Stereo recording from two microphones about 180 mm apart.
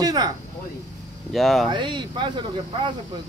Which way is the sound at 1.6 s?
25° right (ahead or behind).